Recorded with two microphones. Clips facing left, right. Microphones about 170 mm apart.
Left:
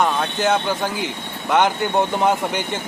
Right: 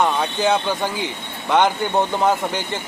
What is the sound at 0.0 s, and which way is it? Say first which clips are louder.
Speech: even; 10° right (ahead or behind).